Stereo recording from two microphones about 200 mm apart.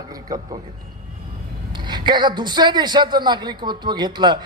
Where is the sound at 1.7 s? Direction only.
20° right (ahead or behind).